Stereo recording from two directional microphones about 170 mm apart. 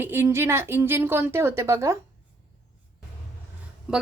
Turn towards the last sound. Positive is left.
turn(degrees=-5)  # may be behind; listen again after turning